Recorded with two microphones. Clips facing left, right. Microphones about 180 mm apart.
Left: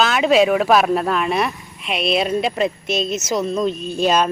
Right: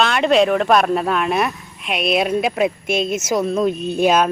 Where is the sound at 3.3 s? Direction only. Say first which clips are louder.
Right 2 dB; 5° right (ahead or behind).